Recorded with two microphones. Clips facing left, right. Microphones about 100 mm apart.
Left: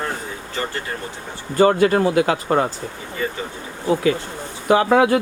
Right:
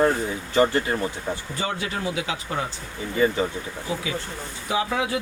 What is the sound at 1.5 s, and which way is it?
Speech, 55° left (ahead or behind).